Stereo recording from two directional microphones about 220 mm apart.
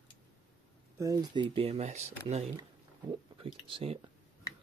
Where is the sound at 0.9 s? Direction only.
15° right (ahead or behind).